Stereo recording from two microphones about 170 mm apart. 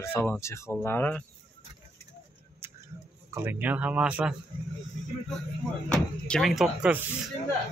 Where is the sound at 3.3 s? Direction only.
15° right (ahead or behind).